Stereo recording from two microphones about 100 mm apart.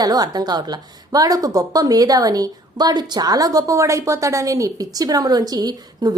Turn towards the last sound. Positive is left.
turn(degrees=-40)  # may be behind; listen again after turning